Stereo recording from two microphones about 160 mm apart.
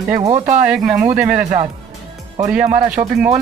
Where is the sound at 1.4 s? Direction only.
50° right (ahead or behind).